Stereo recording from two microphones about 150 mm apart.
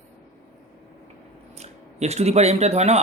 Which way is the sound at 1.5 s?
45° right (ahead or behind).